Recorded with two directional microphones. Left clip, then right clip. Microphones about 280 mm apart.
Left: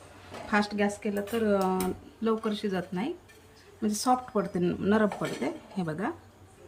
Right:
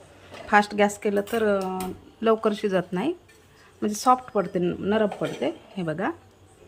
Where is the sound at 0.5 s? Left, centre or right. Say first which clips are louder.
Right 8 dB; centre.